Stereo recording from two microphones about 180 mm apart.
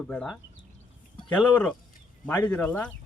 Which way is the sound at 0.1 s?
5° left (ahead or behind).